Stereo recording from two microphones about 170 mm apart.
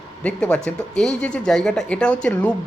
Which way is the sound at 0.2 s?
5° left (ahead or behind).